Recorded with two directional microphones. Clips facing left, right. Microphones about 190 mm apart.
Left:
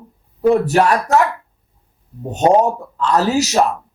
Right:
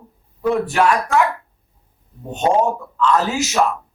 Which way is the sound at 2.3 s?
40° left (ahead or behind).